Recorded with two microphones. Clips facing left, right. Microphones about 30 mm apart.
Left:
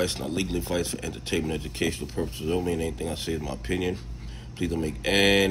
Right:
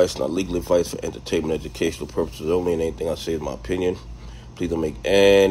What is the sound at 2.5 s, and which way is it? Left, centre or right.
Speech, centre.